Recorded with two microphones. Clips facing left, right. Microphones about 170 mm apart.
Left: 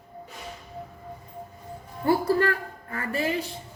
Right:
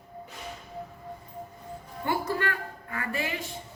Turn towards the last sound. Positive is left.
turn(degrees=40)  # may be behind; listen again after turning